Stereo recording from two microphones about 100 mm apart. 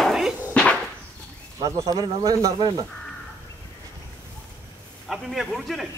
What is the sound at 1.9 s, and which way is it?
Speech, 40° right (ahead or behind).